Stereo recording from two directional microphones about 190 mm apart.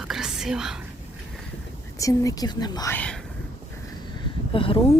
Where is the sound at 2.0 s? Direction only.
15° left (ahead or behind).